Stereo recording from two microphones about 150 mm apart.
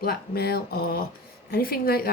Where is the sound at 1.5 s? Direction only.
80° left.